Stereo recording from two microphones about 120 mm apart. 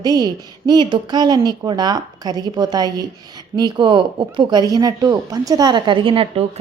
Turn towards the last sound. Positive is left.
turn(degrees=-50)  # may be behind; listen again after turning